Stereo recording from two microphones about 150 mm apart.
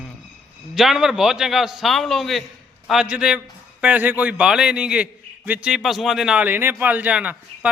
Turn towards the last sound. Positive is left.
turn(degrees=-10)  # may be behind; listen again after turning